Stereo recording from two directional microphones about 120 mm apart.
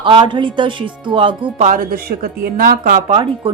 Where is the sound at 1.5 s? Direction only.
85° right.